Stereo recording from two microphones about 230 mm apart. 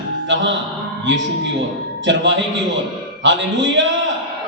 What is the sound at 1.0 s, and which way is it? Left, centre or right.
Speech, right.